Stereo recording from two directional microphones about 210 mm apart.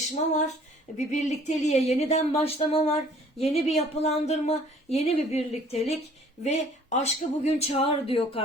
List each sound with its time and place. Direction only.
0.1 s speech: 35° left (ahead or behind)